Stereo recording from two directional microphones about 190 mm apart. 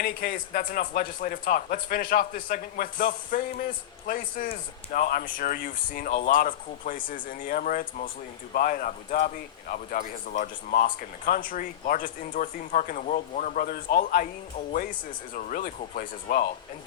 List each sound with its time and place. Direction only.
0.0 s speech: 45° left (ahead or behind)